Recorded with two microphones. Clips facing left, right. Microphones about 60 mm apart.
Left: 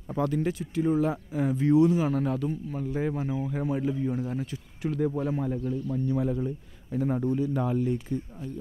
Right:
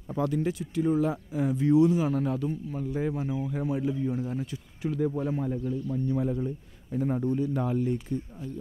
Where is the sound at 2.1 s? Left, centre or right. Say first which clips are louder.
Left 1 dB; left.